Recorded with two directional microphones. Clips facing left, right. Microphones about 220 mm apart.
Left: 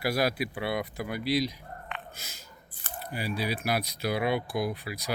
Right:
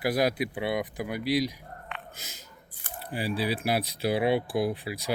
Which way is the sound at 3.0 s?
30° right (ahead or behind).